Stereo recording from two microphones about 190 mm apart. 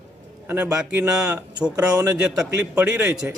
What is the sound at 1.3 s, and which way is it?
Speech, 20° right (ahead or behind).